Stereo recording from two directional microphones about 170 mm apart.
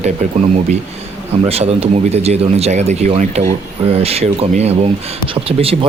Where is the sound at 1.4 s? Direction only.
35° right (ahead or behind).